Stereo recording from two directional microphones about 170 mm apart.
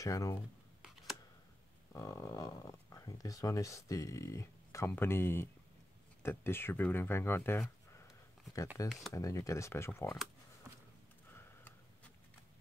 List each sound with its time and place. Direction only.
0.0 s speech: 20° left (ahead or behind)
1.9 s speech: 20° left (ahead or behind)
8.8 s speech: centre (ahead or behind)
9.1 s speech: 20° left (ahead or behind)